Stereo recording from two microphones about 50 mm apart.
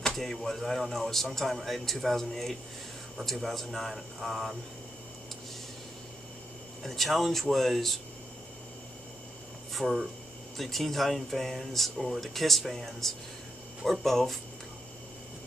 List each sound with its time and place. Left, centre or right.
0.0 s speech: centre
6.8 s speech: centre
9.8 s speech: centre
10.6 s speech: centre